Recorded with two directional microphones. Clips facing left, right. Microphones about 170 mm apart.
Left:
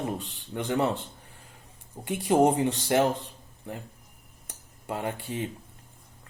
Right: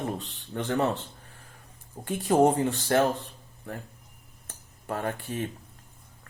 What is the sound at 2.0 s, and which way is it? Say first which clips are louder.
Speech: even; 15° left (ahead or behind).